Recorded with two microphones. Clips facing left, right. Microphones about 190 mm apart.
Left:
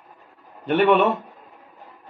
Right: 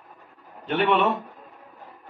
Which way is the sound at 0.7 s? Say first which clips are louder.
Left 4 dB; centre (ahead or behind).